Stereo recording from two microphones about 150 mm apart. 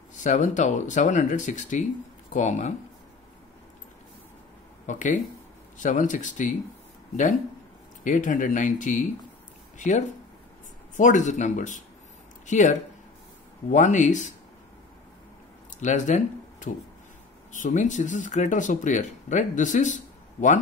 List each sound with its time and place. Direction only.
0.2 s speech: 55° left (ahead or behind)
4.8 s speech: 55° left (ahead or behind)
8.0 s speech: 60° left (ahead or behind)
15.8 s speech: 55° left (ahead or behind)